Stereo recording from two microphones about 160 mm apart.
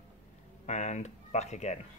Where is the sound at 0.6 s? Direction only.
50° left (ahead or behind).